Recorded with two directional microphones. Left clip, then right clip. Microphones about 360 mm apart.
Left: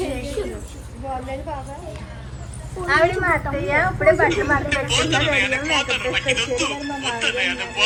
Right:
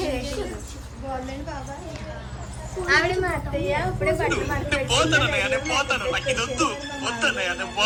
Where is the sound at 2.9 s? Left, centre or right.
Centre.